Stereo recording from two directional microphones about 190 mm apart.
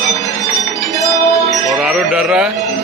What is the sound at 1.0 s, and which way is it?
Music, 15° left (ahead or behind).